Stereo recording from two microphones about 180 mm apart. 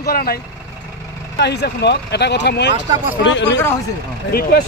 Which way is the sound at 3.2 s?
85° left.